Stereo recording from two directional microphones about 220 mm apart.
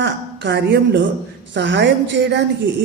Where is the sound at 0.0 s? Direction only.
50° right (ahead or behind).